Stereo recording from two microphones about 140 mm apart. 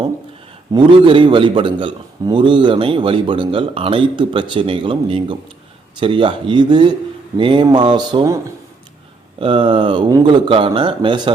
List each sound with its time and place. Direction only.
0.7 s a man's voice: 35° right (ahead or behind)
8.2 s speech: 20° right (ahead or behind)
9.4 s a man's voice: 40° right (ahead or behind)